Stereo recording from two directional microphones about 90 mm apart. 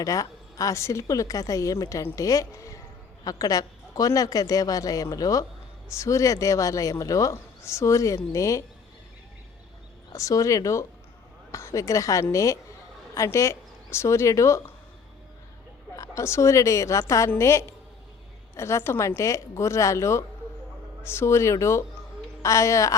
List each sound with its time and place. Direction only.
0.0 s speech: 40° left (ahead or behind)
10.1 s a woman's voice: 35° left (ahead or behind)
16.0 s speech: 30° left (ahead or behind)